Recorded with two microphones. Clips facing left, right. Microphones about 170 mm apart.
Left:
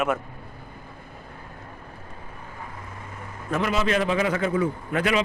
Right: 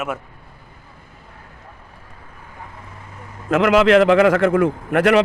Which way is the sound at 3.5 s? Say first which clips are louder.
Right 11 dB; 90° right.